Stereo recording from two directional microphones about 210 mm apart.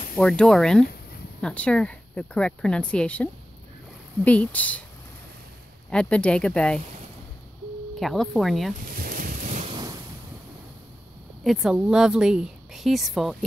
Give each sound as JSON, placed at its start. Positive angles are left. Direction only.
{"t": 0.1, "sound": "a woman's voice", "side_deg": 0}
{"t": 5.9, "sound": "a woman's voice", "side_deg": 5}
{"t": 8.0, "sound": "a woman's voice", "side_deg": 0}
{"t": 8.8, "sound": "boat", "side_deg": -45}
{"t": 9.7, "sound": "waves", "side_deg": -20}
{"t": 11.4, "sound": "a woman's voice", "side_deg": 0}